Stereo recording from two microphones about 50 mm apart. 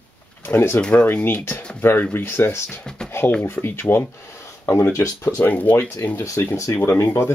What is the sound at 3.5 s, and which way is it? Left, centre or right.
Speech, left.